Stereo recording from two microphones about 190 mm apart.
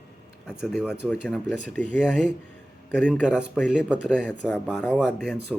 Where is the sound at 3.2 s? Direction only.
5° right (ahead or behind).